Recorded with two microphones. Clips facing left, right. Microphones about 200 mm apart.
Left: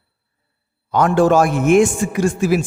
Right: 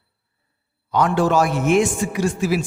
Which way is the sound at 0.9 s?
50° left (ahead or behind).